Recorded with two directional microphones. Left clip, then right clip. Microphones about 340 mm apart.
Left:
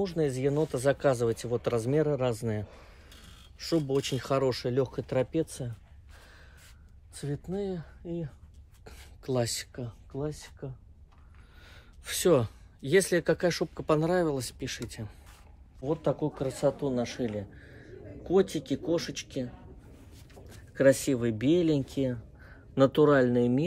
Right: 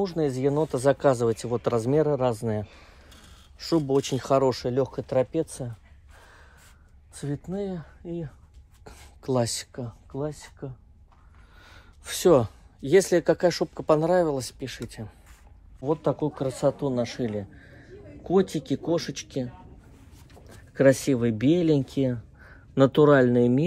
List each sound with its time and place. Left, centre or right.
0.0 s speech: centre
7.2 s speech: centre
15.9 s a man's voice: centre